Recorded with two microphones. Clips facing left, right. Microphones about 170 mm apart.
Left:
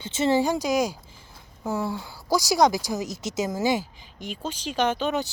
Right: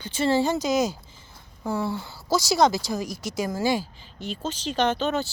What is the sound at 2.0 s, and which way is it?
Speech, 15° left (ahead or behind).